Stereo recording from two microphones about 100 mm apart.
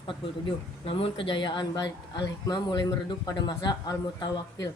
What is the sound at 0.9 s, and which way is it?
A woman's voice, 65° left (ahead or behind).